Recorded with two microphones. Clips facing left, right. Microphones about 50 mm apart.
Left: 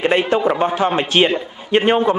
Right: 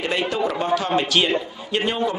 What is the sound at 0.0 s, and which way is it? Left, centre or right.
A man's voice, left.